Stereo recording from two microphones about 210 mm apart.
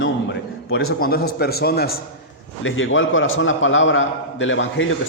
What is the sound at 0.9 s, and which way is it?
A man's voice, 45° left (ahead or behind).